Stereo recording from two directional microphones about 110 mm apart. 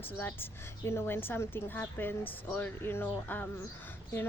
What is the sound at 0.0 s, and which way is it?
A woman's voice, 20° left (ahead or behind).